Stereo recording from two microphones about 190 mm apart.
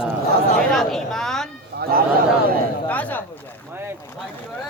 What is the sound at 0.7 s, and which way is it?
Speech, centre (ahead or behind).